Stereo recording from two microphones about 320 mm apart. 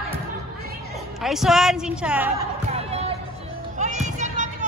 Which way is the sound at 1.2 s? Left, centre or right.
Centre.